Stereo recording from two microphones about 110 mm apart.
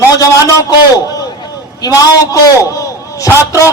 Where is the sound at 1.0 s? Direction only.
35° left (ahead or behind).